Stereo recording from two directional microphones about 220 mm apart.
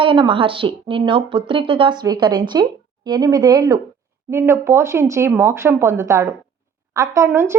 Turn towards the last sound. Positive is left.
turn(degrees=-10)  # may be behind; listen again after turning